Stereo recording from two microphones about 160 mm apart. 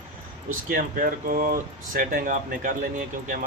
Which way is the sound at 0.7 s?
60° right (ahead or behind).